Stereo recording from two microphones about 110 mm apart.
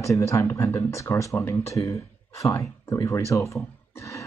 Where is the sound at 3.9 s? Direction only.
30° left (ahead or behind).